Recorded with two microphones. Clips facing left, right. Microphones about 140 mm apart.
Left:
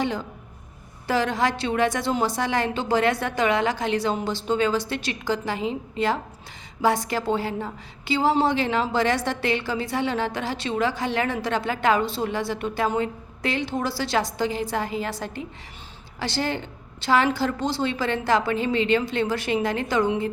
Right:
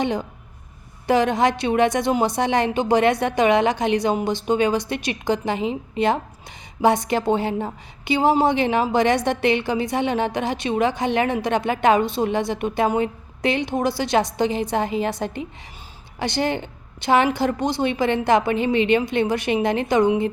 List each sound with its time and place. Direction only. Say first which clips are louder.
0.0 s a woman's voice: right 3 dB; 20° right (ahead or behind)